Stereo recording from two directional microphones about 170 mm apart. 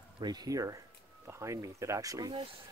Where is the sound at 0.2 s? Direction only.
20° right (ahead or behind).